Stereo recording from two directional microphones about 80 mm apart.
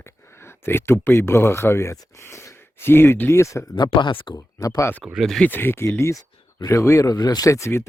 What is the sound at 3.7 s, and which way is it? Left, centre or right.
Speech, left.